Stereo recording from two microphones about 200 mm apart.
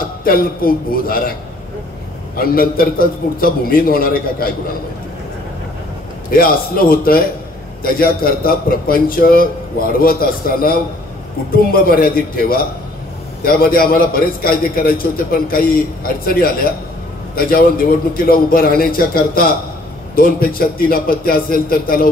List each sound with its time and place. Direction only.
0.2 s a man's voice: 45° left (ahead or behind)
2.3 s a man's voice: 45° left (ahead or behind)
6.3 s a man's voice: 45° left (ahead or behind)